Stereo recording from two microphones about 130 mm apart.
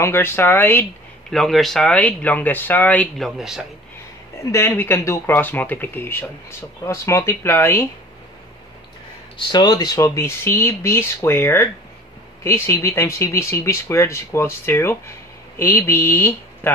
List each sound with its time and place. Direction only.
0.0 s speech: 20° left (ahead or behind)
1.3 s speech: centre (ahead or behind)
3.2 s a man's voice: centre (ahead or behind)
4.5 s speech: 20° left (ahead or behind)
9.5 s speech: 30° left (ahead or behind); by 16.7 s 15° left (ahead or behind)